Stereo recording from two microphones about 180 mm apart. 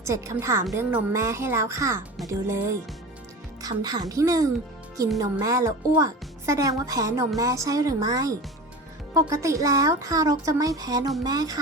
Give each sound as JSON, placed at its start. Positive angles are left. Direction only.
{"t": 0.0, "sound": "a woman's voice", "side_deg": -15}